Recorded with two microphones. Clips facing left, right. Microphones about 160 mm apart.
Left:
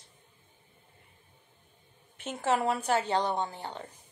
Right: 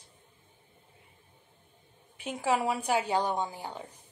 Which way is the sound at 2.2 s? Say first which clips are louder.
Even; 10° right (ahead or behind).